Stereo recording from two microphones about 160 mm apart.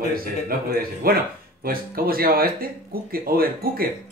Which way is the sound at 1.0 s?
65° right (ahead or behind).